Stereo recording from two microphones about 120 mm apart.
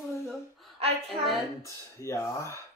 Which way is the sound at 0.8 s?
55° right (ahead or behind).